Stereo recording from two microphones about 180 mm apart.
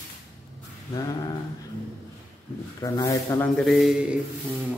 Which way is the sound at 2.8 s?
20° left (ahead or behind).